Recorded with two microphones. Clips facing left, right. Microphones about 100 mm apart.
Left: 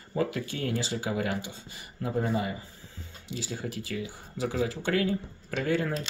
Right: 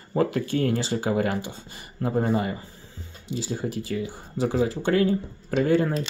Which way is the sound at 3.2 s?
30° right (ahead or behind).